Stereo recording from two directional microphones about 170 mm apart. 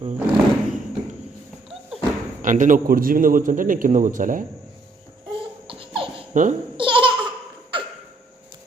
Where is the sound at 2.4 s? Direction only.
50° right (ahead or behind).